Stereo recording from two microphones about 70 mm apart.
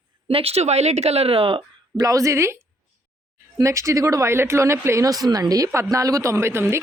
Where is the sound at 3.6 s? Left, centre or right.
Right.